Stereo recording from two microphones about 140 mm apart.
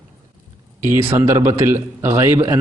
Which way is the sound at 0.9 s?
20° right (ahead or behind).